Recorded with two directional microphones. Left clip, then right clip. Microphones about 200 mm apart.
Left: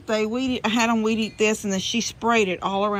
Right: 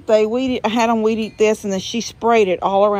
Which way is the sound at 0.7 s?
20° right (ahead or behind).